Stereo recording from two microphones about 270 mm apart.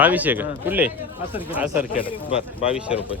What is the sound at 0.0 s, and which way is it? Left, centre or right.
Speech, centre.